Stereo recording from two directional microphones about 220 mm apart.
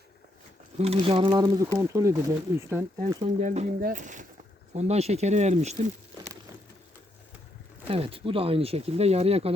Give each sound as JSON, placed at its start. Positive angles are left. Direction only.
{"t": 0.8, "sound": "speech", "side_deg": -25}
{"t": 3.2, "sound": "speech", "side_deg": -30}
{"t": 7.9, "sound": "speech", "side_deg": -25}